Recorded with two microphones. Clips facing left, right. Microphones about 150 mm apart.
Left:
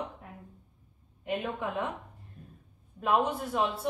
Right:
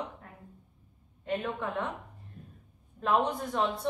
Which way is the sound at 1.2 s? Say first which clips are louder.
Even; 10° left (ahead or behind).